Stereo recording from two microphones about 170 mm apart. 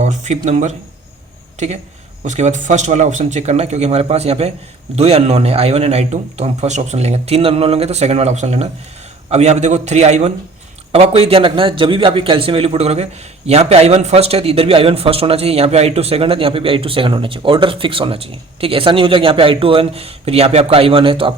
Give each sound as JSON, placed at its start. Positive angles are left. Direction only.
{"t": 0.0, "sound": "speech", "side_deg": -45}